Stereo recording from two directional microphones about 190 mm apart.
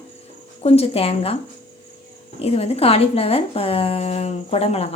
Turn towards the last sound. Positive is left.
turn(degrees=35)  # may be behind; listen again after turning